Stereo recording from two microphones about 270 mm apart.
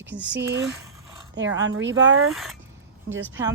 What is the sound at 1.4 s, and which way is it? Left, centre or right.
Speech, right.